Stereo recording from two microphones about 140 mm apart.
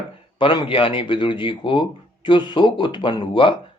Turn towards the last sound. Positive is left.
turn(degrees=40)  # may be behind; listen again after turning